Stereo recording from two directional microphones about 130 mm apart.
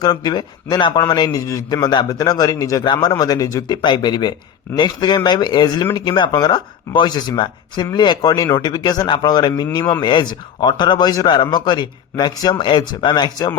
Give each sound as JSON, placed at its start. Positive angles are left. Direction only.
{"t": 0.0, "sound": "a man's voice", "side_deg": 30}